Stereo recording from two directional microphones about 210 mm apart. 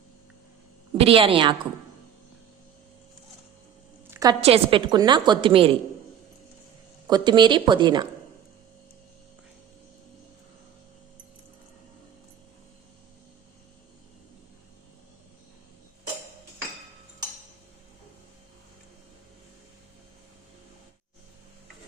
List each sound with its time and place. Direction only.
0.9 s a woman's voice: 25° right (ahead or behind)
4.1 s a sound: 15° right (ahead or behind)
4.4 s a woman's voice: 25° right (ahead or behind)
7.1 s a woman's voice: 20° right (ahead or behind)